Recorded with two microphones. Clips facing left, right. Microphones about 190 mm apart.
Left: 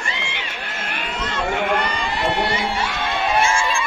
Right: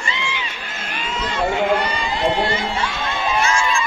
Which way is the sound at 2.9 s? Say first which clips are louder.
Left 1 dB; 60° left (ahead or behind).